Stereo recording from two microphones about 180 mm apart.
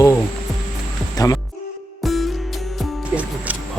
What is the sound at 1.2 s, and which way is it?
Speech, 20° left (ahead or behind).